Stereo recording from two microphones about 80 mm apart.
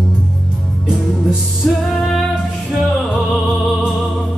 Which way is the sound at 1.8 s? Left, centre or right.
Centre.